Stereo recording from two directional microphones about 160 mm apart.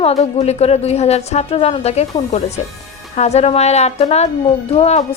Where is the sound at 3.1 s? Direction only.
45° left (ahead or behind).